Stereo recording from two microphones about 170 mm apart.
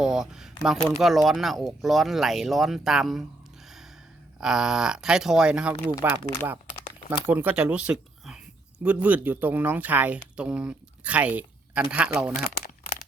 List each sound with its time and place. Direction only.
0.0 s speech: 5° right (ahead or behind)
4.4 s speech: 5° right (ahead or behind)
12.3 s crumpling: 55° left (ahead or behind)